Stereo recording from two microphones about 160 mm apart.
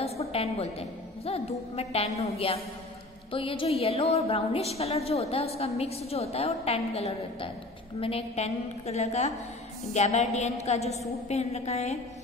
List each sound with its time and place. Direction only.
0.0 s music: 40° left (ahead or behind)
1.8 s a woman's voice: 40° left (ahead or behind)